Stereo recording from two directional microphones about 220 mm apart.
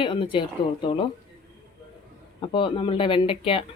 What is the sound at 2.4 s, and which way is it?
Speech, 20° left (ahead or behind).